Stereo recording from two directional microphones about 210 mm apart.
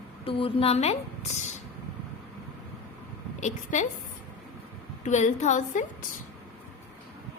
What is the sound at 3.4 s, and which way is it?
Speech, 35° left (ahead or behind).